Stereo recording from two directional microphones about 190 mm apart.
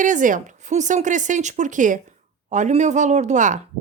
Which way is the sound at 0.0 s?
40° right (ahead or behind).